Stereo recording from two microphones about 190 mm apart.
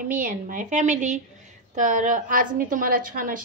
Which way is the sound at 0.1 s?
45° right (ahead or behind).